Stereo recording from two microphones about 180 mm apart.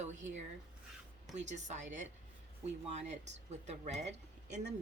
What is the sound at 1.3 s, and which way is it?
Speech, 40° right (ahead or behind).